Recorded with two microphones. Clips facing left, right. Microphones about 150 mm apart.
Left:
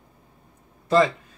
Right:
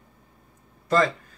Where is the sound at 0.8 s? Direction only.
15° left (ahead or behind).